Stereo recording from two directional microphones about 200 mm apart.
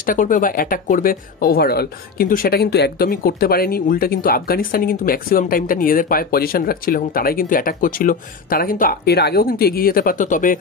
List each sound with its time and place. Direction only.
0.0 s speech: 40° left (ahead or behind)